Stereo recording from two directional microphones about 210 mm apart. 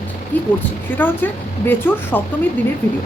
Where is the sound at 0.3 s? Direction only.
10° left (ahead or behind).